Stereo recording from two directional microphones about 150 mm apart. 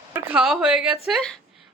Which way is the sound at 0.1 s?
15° right (ahead or behind).